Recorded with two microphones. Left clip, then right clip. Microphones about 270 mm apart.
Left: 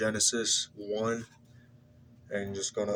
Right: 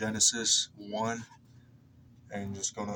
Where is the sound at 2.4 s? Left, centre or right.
Right.